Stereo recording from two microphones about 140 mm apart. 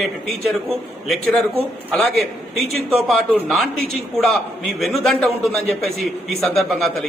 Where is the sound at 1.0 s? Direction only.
Centre (ahead or behind).